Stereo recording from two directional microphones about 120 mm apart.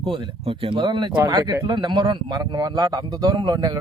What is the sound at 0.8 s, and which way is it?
Speech, 35° right (ahead or behind).